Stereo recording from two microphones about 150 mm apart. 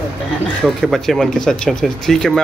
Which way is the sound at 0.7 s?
Centre (ahead or behind).